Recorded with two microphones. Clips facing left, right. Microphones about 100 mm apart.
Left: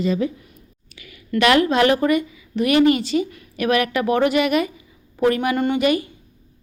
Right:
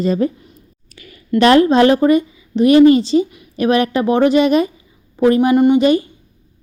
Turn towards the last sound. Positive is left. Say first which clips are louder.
# right 7 dB
turn(degrees=-30)  # may be behind; listen again after turning